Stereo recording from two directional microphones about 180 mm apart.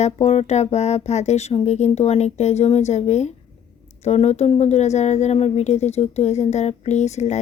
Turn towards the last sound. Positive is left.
turn(degrees=40)  # may be behind; listen again after turning